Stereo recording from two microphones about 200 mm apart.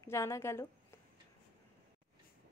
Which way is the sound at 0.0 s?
15° left (ahead or behind).